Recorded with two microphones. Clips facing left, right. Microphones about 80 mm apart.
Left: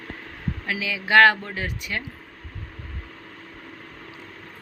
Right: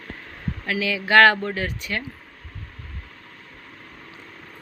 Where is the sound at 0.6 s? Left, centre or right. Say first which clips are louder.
Right 3 dB; centre.